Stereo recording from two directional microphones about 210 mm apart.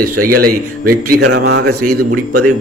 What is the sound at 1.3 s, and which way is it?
Speech, 55° right (ahead or behind).